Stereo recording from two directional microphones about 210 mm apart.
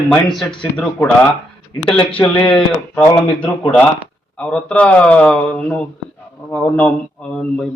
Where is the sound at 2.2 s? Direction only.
25° left (ahead or behind).